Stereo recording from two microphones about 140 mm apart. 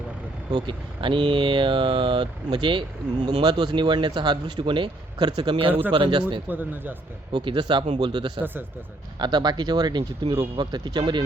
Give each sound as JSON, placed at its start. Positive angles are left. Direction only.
{"t": 0.5, "sound": "a man's voice", "side_deg": -35}
{"t": 6.5, "sound": "speech", "side_deg": -15}
{"t": 7.3, "sound": "a man's voice", "side_deg": -35}